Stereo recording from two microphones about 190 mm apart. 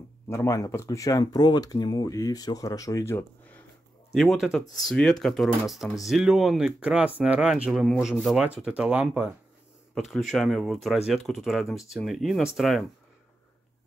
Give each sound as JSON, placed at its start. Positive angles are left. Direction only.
{"t": 0.3, "sound": "speech", "side_deg": 15}
{"t": 4.1, "sound": "speech", "side_deg": 0}